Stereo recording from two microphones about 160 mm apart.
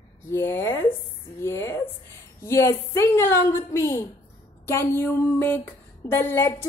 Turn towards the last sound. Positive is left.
turn(degrees=15)  # may be behind; listen again after turning